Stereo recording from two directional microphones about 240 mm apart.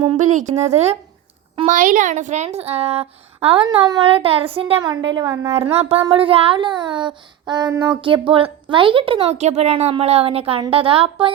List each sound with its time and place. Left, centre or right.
0.0 s a child's voice: right
5.5 s a child's voice: right